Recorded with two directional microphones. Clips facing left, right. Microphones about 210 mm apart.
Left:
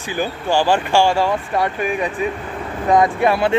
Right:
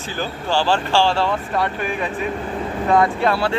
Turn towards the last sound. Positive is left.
turn(degrees=15)  # may be behind; listen again after turning